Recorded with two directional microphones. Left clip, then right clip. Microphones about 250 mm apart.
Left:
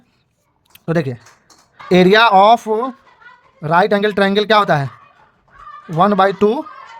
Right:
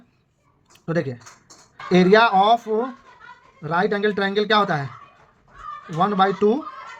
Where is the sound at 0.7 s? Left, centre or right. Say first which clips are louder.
Left 5 dB; left.